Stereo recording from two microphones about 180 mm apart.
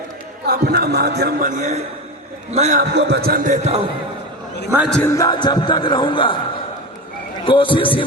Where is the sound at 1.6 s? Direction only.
40° right (ahead or behind).